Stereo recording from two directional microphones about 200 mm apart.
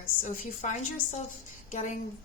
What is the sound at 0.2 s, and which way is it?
Speech, 40° left (ahead or behind).